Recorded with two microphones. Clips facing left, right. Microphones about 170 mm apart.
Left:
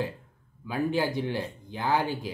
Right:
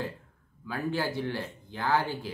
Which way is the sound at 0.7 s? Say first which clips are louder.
Left 4 dB; 15° left (ahead or behind).